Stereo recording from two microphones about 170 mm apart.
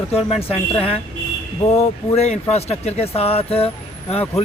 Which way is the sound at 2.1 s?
40° left (ahead or behind).